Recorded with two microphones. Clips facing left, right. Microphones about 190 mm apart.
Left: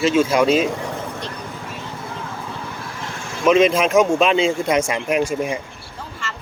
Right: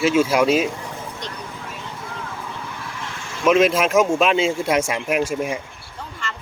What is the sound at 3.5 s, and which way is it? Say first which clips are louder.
Speech: left 1 dB; 5° right (ahead or behind).